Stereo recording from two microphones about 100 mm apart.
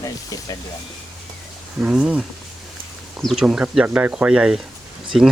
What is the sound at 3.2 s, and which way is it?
Speech, centre (ahead or behind).